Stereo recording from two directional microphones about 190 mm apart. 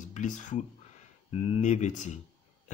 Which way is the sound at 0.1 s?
40° left (ahead or behind).